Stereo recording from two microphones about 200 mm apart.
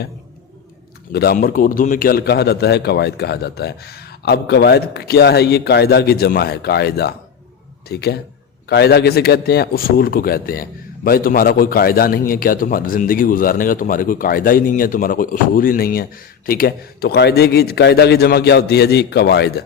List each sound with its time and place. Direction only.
1.1 s a man's voice: 50° left (ahead or behind)